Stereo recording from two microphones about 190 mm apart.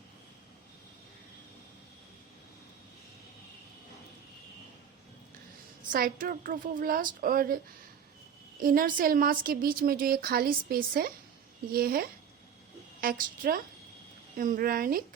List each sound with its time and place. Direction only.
5.9 s a woman's voice: 50° right (ahead or behind)
8.6 s a woman's voice: 50° right (ahead or behind)